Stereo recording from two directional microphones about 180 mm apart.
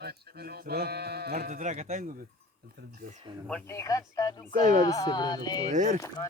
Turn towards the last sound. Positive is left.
turn(degrees=-40)  # may be behind; listen again after turning